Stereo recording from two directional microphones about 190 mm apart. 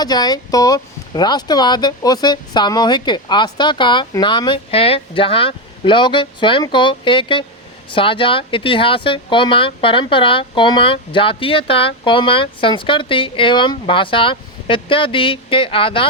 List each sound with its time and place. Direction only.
0.0 s speech: 20° left (ahead or behind)